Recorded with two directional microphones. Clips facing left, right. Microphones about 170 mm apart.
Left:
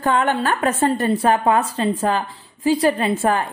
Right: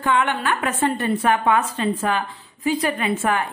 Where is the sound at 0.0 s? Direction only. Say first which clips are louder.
Left 2 dB; 40° left (ahead or behind).